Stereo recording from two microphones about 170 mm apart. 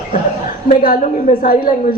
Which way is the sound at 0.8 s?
55° left (ahead or behind).